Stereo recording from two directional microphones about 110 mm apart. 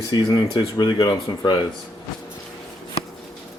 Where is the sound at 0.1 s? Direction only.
40° left (ahead or behind).